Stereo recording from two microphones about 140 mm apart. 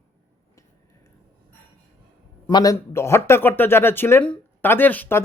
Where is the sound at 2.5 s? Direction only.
30° left (ahead or behind).